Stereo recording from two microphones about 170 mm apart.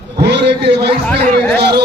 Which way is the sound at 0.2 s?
80° right.